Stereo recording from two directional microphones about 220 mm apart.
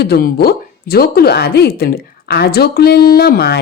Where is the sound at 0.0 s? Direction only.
45° left (ahead or behind).